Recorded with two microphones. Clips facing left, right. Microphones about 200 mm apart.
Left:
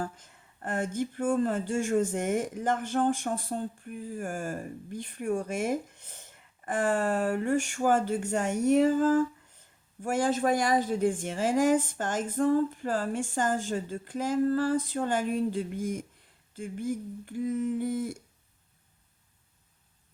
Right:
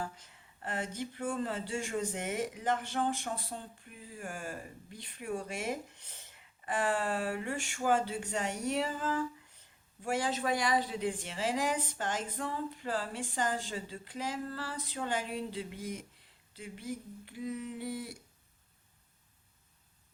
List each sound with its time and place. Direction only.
0.0 s speech: 50° left (ahead or behind)